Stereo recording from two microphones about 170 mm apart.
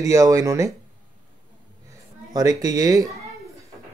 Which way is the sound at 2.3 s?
20° right (ahead or behind).